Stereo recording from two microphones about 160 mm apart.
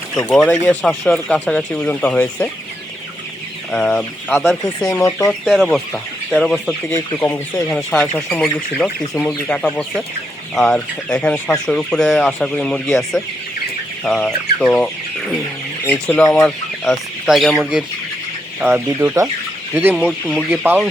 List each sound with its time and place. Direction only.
0.3 s speech: 5° left (ahead or behind)
3.7 s speech: 5° left (ahead or behind)
5.3 s speech: centre (ahead or behind)
15.9 s speech: 10° left (ahead or behind)
18.7 s chicken: 15° right (ahead or behind)
20.3 s speech: 5° right (ahead or behind)